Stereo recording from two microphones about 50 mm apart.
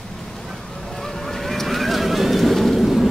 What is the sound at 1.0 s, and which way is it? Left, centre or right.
Vehicle, centre.